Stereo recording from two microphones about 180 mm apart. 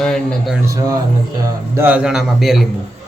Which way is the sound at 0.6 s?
20° right (ahead or behind).